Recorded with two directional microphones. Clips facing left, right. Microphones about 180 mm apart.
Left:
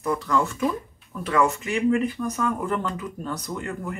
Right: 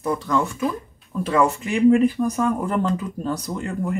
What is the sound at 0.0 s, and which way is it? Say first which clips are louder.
Speech: right 2 dB; 30° right (ahead or behind).